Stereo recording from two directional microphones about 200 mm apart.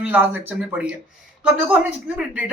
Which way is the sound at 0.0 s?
10° right (ahead or behind).